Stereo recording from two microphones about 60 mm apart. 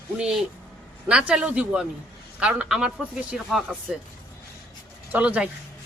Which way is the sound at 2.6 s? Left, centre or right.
Centre.